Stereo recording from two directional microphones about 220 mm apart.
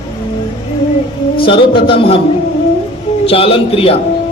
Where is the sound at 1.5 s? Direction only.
25° left (ahead or behind).